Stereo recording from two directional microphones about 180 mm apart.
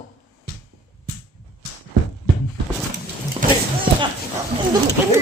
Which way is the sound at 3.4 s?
50° right (ahead or behind).